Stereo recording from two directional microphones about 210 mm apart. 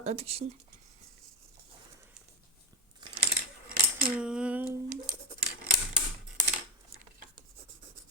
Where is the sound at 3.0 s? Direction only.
20° right (ahead or behind).